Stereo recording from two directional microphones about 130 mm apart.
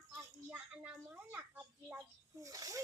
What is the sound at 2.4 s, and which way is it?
Speech, 25° right (ahead or behind).